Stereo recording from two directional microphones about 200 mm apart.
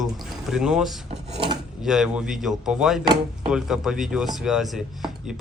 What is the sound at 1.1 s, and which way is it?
Speech, 35° right (ahead or behind).